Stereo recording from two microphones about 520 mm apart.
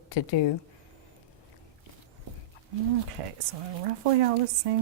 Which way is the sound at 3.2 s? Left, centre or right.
Right.